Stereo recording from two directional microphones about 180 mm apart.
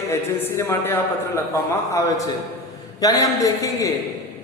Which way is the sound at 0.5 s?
10° left (ahead or behind).